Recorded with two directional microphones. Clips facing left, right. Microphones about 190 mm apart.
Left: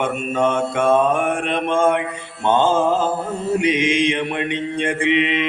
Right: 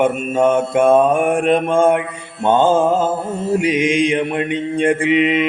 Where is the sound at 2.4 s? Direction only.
50° right (ahead or behind).